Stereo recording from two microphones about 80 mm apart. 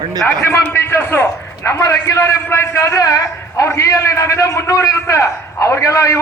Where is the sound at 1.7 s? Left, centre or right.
Left.